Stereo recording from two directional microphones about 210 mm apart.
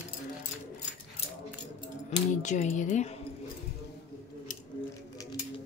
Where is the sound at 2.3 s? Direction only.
35° left (ahead or behind).